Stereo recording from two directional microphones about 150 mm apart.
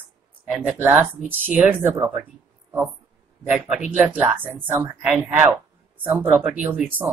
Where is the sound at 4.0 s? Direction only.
10° right (ahead or behind).